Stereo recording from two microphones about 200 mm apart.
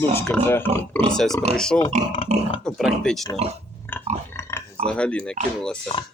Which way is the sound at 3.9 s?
10° left (ahead or behind).